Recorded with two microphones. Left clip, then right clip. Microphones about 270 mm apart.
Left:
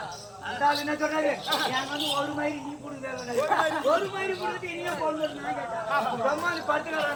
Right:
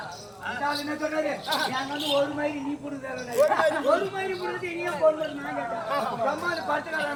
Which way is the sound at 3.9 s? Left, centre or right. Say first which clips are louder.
Even; centre.